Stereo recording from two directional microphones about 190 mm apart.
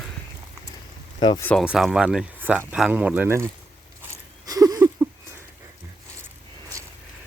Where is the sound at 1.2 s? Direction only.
20° left (ahead or behind).